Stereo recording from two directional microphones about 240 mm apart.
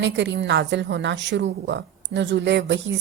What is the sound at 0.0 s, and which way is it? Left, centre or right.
A woman's voice, right.